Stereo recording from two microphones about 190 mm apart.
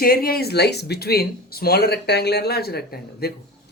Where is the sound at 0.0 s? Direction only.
50° left (ahead or behind).